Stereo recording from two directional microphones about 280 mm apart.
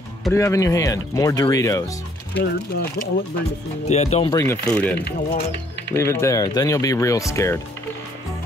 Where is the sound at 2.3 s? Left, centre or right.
Left.